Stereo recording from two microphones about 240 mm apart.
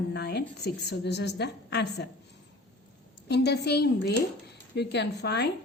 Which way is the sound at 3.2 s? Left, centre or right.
Left.